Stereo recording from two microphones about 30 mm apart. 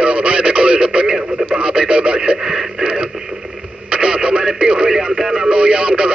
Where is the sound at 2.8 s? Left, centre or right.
Right.